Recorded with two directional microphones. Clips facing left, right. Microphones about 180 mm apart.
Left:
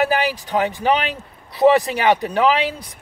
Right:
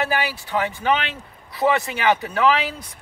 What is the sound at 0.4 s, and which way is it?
Speech, 35° left (ahead or behind).